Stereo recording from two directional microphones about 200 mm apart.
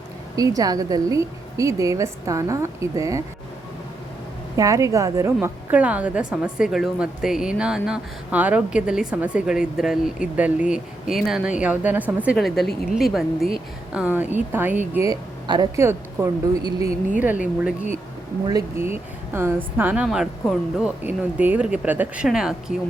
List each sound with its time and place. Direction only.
0.3 s speech: 20° right (ahead or behind)
4.5 s a woman's voice: 15° right (ahead or behind)
18.4 s speech: 15° right (ahead or behind)